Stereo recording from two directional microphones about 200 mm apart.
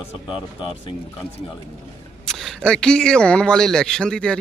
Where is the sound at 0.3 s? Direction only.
25° left (ahead or behind).